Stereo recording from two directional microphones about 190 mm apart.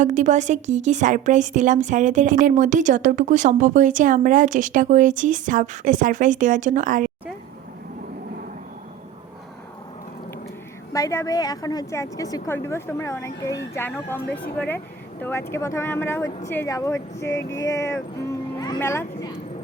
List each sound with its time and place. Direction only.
0.0 s a woman's voice: 40° right (ahead or behind)
10.9 s a woman's voice: 15° left (ahead or behind)